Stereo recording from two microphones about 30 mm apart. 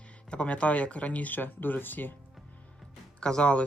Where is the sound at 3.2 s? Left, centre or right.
Left.